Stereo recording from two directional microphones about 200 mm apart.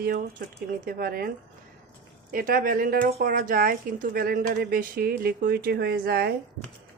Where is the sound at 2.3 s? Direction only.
45° right (ahead or behind).